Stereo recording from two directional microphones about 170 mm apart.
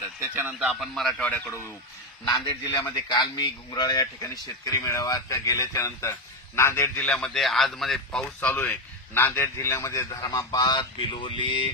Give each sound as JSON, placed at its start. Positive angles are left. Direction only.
{"t": 0.2, "sound": "speech", "side_deg": -15}
{"t": 0.7, "sound": "speech", "side_deg": 0}
{"t": 2.2, "sound": "a man's voice", "side_deg": 25}
{"t": 2.6, "sound": "a man's voice", "side_deg": 15}